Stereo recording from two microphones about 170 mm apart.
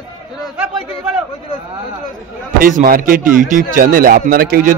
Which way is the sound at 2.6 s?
55° right (ahead or behind).